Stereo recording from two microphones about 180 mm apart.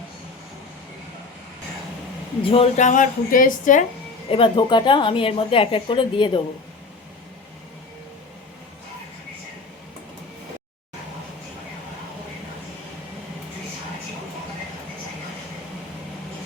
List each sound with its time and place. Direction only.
2.4 s a woman's voice: 30° left (ahead or behind)
4.3 s speech: 30° left (ahead or behind)